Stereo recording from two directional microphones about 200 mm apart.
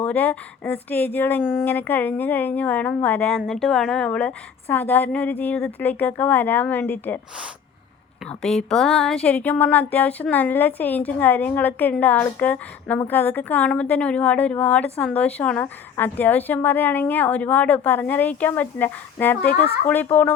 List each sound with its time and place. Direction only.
0.0 s speech: 10° left (ahead or behind)
8.3 s speech: 5° left (ahead or behind)